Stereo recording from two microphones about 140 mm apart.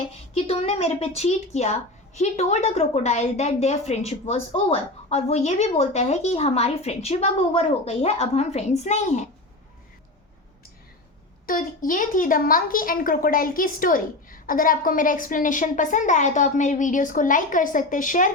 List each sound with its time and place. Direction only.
0.3 s a woman's voice: 45° left (ahead or behind)
11.4 s a woman's voice: 80° left